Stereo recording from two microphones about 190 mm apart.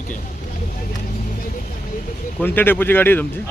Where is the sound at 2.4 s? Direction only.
10° left (ahead or behind).